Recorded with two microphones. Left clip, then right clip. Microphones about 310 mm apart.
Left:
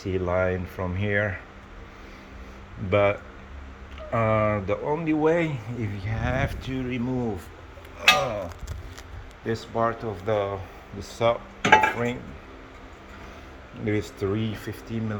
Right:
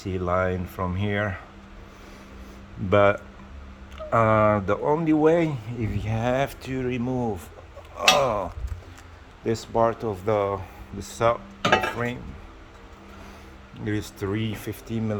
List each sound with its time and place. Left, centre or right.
0.0 s speech: centre
2.9 s speech: centre
8.0 s speech: centre
9.5 s speech: right
13.8 s speech: centre